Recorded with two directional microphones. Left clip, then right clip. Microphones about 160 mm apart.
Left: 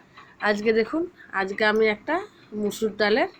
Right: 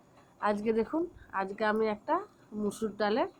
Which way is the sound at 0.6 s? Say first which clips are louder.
Left 8 dB; 10° left (ahead or behind).